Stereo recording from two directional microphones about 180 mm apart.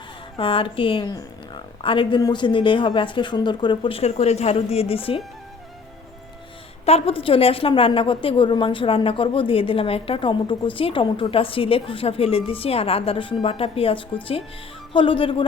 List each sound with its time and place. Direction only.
0.3 s a woman's voice: 30° left (ahead or behind)
6.8 s a woman's voice: 35° left (ahead or behind)